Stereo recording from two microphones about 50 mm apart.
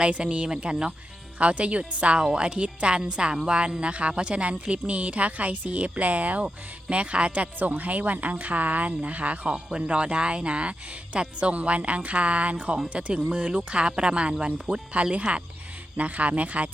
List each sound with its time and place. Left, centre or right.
0.0 s a woman's voice: right